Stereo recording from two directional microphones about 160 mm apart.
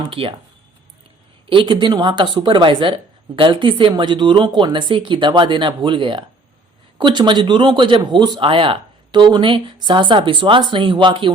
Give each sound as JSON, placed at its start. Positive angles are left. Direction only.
{"t": 0.0, "sound": "speech", "side_deg": -35}
{"t": 1.5, "sound": "a woman's voice", "side_deg": -30}